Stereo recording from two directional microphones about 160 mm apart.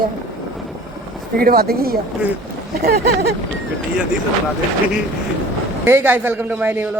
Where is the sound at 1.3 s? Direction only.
70° right (ahead or behind).